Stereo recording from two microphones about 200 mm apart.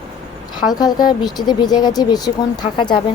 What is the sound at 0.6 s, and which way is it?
Speech, 20° left (ahead or behind).